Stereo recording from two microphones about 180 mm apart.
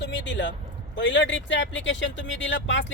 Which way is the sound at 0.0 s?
85° left.